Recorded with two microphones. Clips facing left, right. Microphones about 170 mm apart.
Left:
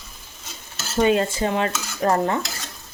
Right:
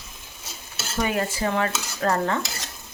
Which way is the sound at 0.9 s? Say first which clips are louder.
Left 6 dB; 25° left (ahead or behind).